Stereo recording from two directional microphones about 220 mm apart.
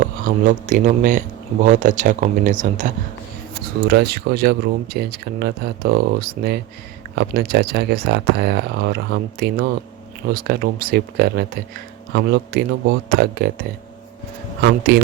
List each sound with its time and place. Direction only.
0.0 s speech: 35° right (ahead or behind)
3.8 s speech: 45° right (ahead or behind)
14.6 s speech: 45° right (ahead or behind)